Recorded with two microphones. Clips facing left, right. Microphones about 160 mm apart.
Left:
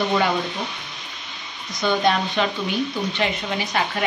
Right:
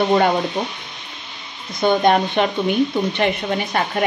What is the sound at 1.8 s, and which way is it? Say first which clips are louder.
Speech: right 5 dB; 50° right (ahead or behind).